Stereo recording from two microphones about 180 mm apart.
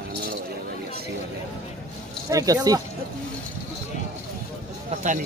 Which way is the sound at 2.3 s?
20° right (ahead or behind).